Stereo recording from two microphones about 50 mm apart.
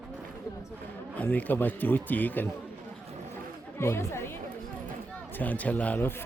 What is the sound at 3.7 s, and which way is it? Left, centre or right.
Speech, left.